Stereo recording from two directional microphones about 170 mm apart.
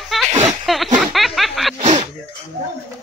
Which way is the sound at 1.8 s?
40° right (ahead or behind).